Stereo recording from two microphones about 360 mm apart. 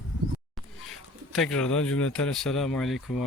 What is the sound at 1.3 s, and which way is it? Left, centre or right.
Speech, centre.